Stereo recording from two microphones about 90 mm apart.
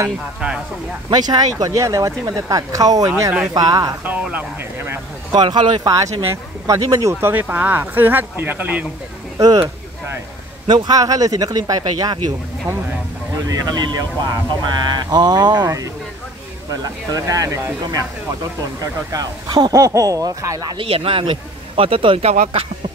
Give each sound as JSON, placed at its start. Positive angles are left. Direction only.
{"t": 1.1, "sound": "speech", "side_deg": -45}
{"t": 3.1, "sound": "speech", "side_deg": -30}
{"t": 3.5, "sound": "speech", "side_deg": -45}
{"t": 4.0, "sound": "speech", "side_deg": -15}
{"t": 5.3, "sound": "speech", "side_deg": -55}
{"t": 5.9, "sound": "speech", "side_deg": -40}
{"t": 7.2, "sound": "speech", "side_deg": -25}
{"t": 10.7, "sound": "speech", "side_deg": -45}
{"t": 13.5, "sound": "speech", "side_deg": -45}
{"t": 18.8, "sound": "speech", "side_deg": -40}
{"t": 20.7, "sound": "speech", "side_deg": -90}